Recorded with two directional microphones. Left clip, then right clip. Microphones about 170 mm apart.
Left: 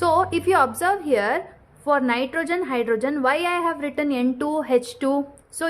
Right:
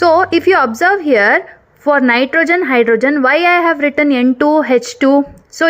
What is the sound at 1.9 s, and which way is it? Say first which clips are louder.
A woman's voice: right 14 dB; 30° right (ahead or behind).